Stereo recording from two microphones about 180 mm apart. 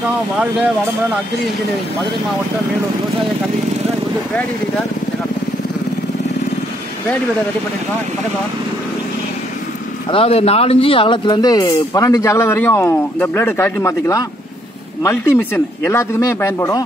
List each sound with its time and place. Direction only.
10.1 s speech: 35° left (ahead or behind); by 16.8 s 15° left (ahead or behind)